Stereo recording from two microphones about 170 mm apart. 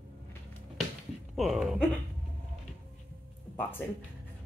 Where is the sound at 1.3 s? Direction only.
Centre (ahead or behind).